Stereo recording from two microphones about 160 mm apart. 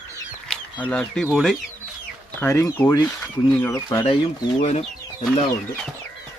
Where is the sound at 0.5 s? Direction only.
5° left (ahead or behind).